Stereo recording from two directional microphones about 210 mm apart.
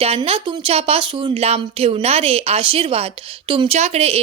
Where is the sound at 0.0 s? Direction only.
30° right (ahead or behind).